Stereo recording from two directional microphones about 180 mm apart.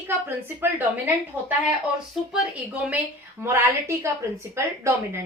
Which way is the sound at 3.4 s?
15° right (ahead or behind).